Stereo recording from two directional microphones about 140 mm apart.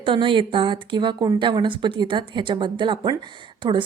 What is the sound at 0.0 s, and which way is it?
A woman's voice, 35° right (ahead or behind).